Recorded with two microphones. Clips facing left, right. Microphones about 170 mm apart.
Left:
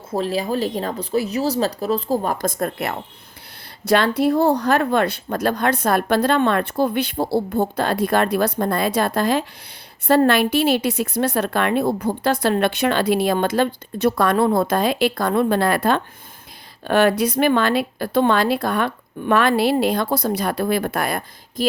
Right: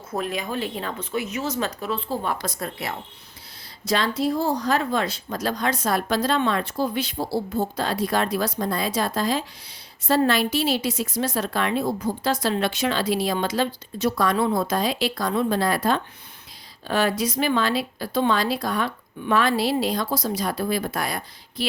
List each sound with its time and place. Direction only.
0.1 s a woman's voice: 30° left (ahead or behind); by 21.7 s 50° left (ahead or behind)